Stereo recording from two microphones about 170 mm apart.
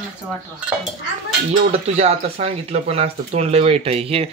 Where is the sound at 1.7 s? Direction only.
35° right (ahead or behind).